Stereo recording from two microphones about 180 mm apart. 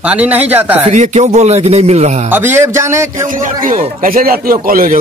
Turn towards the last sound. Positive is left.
turn(degrees=-50)  # may be behind; listen again after turning